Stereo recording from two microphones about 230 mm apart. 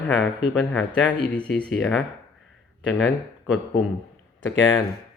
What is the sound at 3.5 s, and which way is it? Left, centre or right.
Speech, centre.